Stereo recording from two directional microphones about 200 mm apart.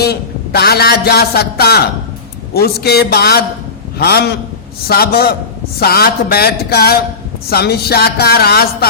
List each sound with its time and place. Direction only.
0.0 s a man's voice: 50° left (ahead or behind)